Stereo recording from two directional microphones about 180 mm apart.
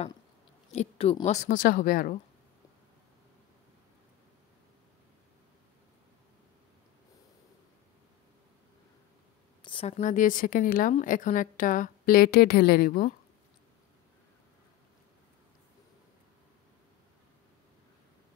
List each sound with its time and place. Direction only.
0.7 s a woman's voice: 35° left (ahead or behind); by 2.1 s 50° left (ahead or behind)
9.6 s a woman's voice: 30° left (ahead or behind); by 13.1 s 55° left (ahead or behind)